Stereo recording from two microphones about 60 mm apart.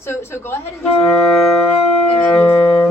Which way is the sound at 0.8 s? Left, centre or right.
Centre.